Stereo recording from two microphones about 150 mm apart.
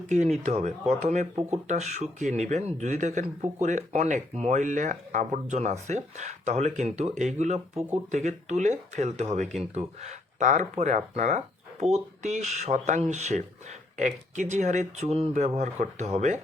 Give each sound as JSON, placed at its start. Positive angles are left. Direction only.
{"t": 0.1, "sound": "speech", "side_deg": -50}